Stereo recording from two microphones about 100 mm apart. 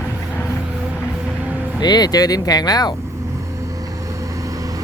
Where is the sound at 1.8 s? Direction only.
45° left (ahead or behind).